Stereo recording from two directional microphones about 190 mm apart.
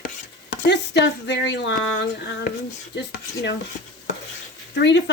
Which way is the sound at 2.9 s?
65° left (ahead or behind).